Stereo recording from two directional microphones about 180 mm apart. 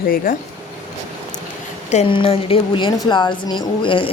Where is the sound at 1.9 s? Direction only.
35° left (ahead or behind).